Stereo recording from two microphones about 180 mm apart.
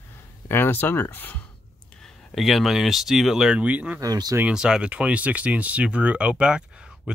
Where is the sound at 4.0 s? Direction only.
20° right (ahead or behind).